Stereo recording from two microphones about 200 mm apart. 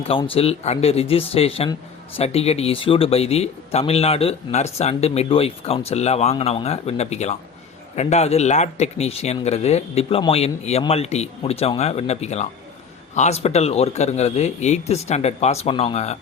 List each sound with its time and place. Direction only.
0.0 s speech: 30° left (ahead or behind)